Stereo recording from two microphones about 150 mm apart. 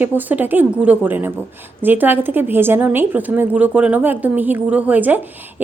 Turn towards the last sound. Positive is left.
turn(degrees=-10)  # may be behind; listen again after turning